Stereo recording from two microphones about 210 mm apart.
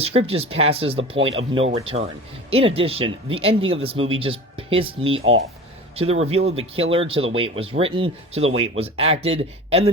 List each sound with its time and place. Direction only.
0.0 s speech: 25° right (ahead or behind)